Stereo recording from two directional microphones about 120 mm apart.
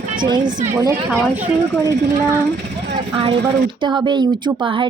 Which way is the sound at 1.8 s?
25° right (ahead or behind).